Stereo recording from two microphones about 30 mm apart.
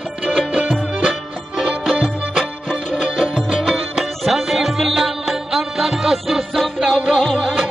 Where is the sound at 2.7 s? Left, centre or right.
Left.